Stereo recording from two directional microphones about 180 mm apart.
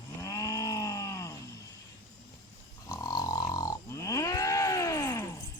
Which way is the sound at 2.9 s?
20° left (ahead or behind).